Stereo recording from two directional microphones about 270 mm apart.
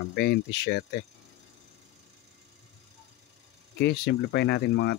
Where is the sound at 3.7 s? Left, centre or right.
Left.